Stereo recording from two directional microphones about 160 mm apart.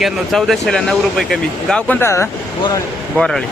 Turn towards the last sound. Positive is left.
turn(degrees=5)  # may be behind; listen again after turning